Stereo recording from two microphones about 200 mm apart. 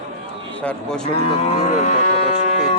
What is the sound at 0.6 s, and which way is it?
Speech, 5° left (ahead or behind).